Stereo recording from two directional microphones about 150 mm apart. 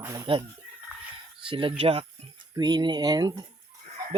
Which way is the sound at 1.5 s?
35° right (ahead or behind).